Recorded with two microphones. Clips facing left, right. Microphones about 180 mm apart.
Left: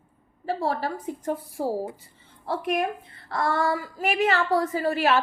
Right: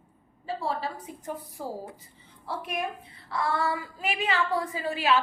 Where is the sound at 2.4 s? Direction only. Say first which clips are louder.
Left 7 dB; 50° left (ahead or behind).